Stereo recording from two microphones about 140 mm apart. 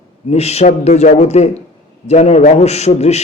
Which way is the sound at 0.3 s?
50° left (ahead or behind).